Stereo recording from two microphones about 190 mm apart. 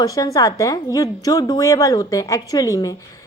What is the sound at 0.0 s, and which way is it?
A woman's voice, 20° left (ahead or behind).